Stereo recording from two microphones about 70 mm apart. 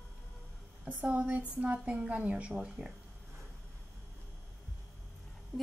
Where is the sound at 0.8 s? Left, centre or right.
Centre.